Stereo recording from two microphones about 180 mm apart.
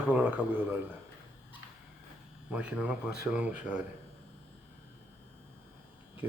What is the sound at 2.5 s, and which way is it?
Speech, 10° right (ahead or behind).